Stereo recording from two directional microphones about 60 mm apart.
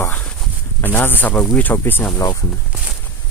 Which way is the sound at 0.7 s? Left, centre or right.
Left.